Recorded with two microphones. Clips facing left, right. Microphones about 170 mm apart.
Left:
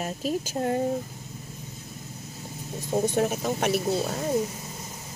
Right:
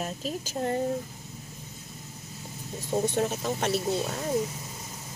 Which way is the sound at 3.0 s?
10° left (ahead or behind).